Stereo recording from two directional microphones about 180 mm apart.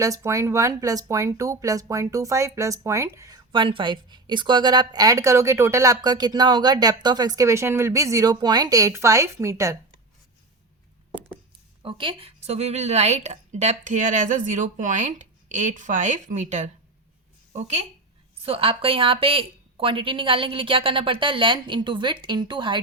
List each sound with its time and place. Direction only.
0.0 s speech: 20° right (ahead or behind)
11.8 s a woman's voice: 30° right (ahead or behind)